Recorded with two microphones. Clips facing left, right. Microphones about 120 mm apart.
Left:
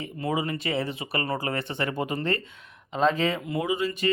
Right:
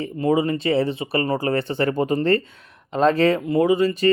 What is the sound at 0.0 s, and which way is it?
Speech, 30° right (ahead or behind).